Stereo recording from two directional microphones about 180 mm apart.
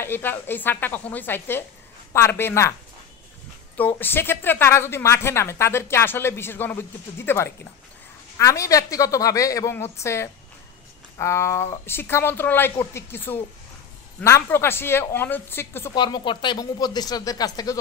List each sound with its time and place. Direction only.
0.0 s a woman's voice: 10° left (ahead or behind)
3.7 s a woman's voice: 10° left (ahead or behind)
15.9 s speech: 25° left (ahead or behind)